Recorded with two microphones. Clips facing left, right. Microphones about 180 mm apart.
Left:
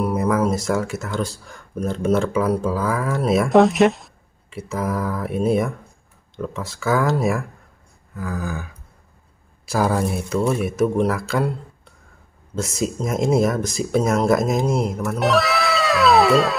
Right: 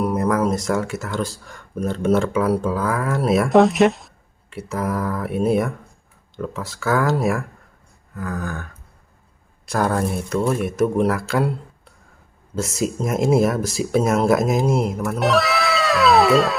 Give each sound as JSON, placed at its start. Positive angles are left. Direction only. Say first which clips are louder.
{"t": 0.0, "sound": "speech", "louder": "even", "side_deg": 0}
{"t": 12.5, "sound": "speech", "louder": "right 1 dB", "side_deg": 0}